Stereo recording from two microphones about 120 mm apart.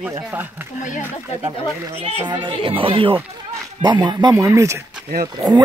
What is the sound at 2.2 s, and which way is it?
Speech, 40° right (ahead or behind).